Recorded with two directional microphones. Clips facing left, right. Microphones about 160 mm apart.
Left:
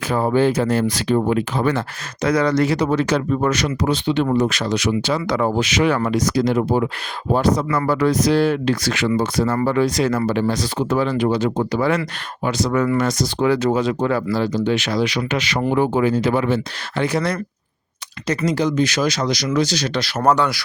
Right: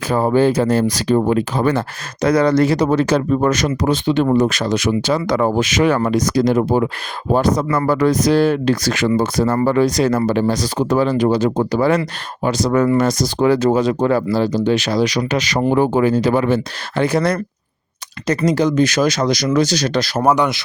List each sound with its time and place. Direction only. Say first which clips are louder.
0.1 s speech: right 3 dB; 40° right (ahead or behind)
20.2 s speech: right 1 dB; 15° right (ahead or behind)